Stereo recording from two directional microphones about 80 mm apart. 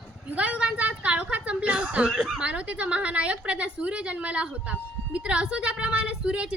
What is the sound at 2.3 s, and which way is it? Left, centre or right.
A woman's voice, centre.